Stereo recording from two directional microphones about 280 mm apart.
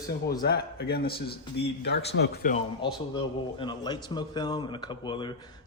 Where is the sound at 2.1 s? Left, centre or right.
Left.